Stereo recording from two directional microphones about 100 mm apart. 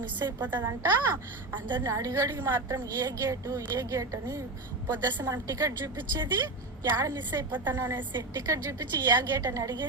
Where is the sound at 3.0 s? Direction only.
35° right (ahead or behind).